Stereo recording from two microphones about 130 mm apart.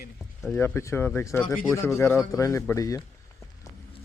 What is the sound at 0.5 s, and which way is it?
Speech, 20° left (ahead or behind).